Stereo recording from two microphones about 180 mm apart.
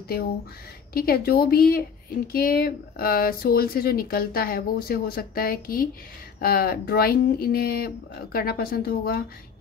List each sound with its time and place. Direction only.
0.9 s speech: 60° left (ahead or behind)